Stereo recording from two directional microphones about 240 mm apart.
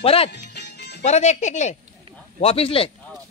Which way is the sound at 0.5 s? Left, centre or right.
Left.